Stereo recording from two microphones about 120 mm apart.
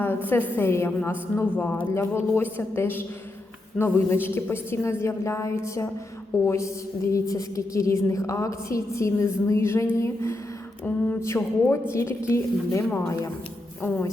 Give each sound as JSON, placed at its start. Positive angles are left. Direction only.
{"t": 0.0, "sound": "a woman's voice", "side_deg": 15}